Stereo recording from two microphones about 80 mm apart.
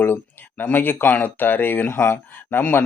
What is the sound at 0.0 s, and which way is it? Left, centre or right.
Speech, left.